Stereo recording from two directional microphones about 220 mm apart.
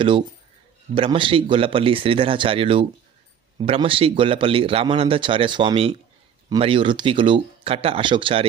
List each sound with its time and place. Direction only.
0.9 s a man's voice: 25° right (ahead or behind)